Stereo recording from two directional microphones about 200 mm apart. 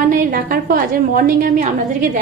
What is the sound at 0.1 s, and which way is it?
A woman's voice, 45° right (ahead or behind).